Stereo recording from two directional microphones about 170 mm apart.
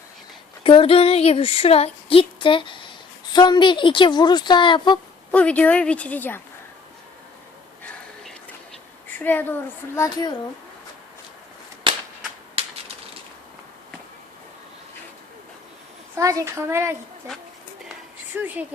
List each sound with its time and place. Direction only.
0.6 s a sound: 30° left (ahead or behind)
3.3 s a woman's voice: 25° left (ahead or behind)
5.3 s speech: 10° left (ahead or behind)
9.0 s speech: 10° left (ahead or behind)
11.9 s cap gun: 30° right (ahead or behind)
16.1 s a child's voice: 20° right (ahead or behind)